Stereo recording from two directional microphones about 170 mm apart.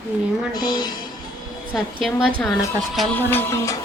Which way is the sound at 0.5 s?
25° left (ahead or behind).